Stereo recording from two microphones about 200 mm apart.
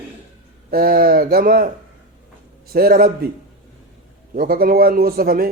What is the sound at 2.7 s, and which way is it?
Speech, 50° right (ahead or behind).